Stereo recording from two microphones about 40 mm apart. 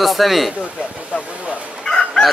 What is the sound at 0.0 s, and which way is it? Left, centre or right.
Speech, centre.